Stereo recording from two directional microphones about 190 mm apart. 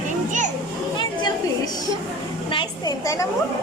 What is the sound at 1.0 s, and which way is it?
A woman's voice, 25° left (ahead or behind).